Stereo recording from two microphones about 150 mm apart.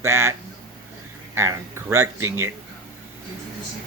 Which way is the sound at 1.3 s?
20° right (ahead or behind).